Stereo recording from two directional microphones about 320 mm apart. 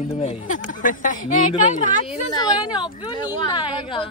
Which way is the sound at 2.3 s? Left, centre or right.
Centre.